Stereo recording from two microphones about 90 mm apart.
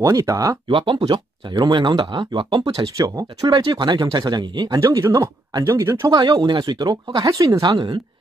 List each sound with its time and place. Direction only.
0.0 s speech: 35° right (ahead or behind)
0.7 s speech: 70° right (ahead or behind)
0.9 s speech: 60° right (ahead or behind)
3.0 s speech: 40° right (ahead or behind)
3.4 s speech: 55° right (ahead or behind)
4.7 s speech: 35° right (ahead or behind)
5.1 s speech: 50° right (ahead or behind)
5.7 s speech: 30° right (ahead or behind)
6.1 s speech: 45° right (ahead or behind)